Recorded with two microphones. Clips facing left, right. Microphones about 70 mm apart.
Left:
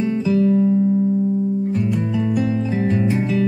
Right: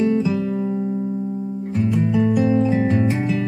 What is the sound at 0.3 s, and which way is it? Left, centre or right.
Music, centre.